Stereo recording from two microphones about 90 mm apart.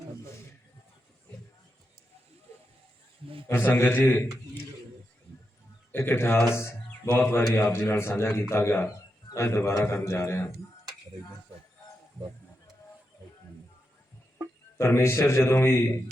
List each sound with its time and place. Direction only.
3.8 s a man's voice: 25° left (ahead or behind)
5.9 s a man's voice: 25° left (ahead or behind)
14.8 s a man's voice: 30° left (ahead or behind)